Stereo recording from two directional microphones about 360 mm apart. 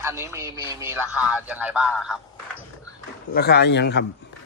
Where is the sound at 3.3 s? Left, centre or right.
Left.